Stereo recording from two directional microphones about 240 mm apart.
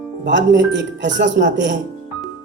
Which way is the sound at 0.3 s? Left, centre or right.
Right.